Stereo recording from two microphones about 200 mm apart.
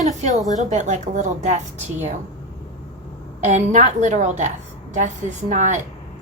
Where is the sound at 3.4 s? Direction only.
35° right (ahead or behind).